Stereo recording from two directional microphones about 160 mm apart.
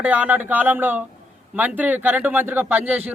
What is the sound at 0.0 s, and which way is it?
Speech, 10° right (ahead or behind).